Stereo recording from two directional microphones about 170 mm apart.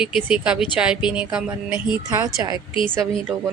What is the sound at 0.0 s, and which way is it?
Speech, 5° right (ahead or behind).